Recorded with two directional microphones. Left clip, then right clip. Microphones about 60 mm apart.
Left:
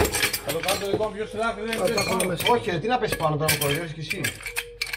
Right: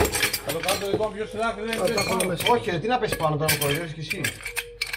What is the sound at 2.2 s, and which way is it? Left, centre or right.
Cutlery, left.